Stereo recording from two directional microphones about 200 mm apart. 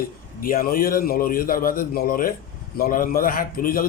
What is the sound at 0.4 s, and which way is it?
A man's voice, 45° left (ahead or behind).